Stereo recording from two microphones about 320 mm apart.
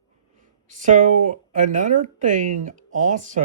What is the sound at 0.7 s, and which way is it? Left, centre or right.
Speech, right.